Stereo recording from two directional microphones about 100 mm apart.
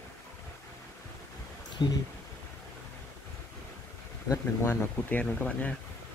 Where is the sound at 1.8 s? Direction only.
45° left (ahead or behind).